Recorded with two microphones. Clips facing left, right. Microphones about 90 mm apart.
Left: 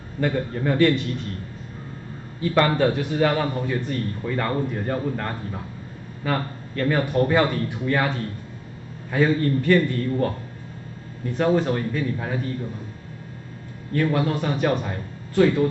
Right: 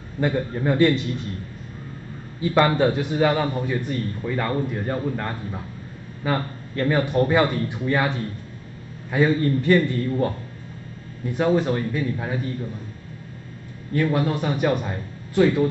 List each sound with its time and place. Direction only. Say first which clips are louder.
0.2 s a man's voice: right 1 dB; 20° right (ahead or behind)
2.4 s a man's voice: right 1 dB; 15° right (ahead or behind)
6.2 s a man's voice: right 1 dB; 20° right (ahead or behind)
11.3 s a man's voice: even; 10° right (ahead or behind)
13.9 s a man's voice: even; 10° right (ahead or behind)